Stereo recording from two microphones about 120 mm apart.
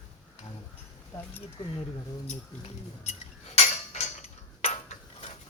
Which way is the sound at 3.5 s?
70° left (ahead or behind).